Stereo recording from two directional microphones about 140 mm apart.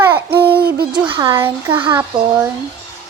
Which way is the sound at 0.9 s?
35° right (ahead or behind).